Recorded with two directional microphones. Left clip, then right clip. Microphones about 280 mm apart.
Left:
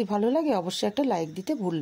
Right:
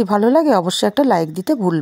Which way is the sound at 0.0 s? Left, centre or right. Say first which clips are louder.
Right 11 dB; right.